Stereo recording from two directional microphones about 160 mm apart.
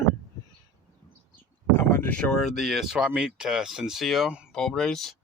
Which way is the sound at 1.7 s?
10° left (ahead or behind).